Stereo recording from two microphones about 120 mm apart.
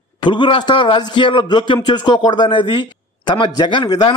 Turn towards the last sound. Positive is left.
turn(degrees=35)  # may be behind; listen again after turning